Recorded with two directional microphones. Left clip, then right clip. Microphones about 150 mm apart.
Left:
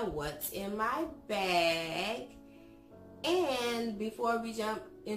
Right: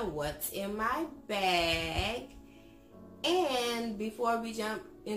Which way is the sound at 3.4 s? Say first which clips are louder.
Right 1 dB; 10° right (ahead or behind).